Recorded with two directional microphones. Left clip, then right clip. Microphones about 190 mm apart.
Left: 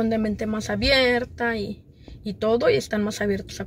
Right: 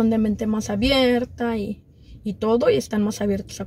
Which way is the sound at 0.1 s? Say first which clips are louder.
Right 2 dB; centre (ahead or behind).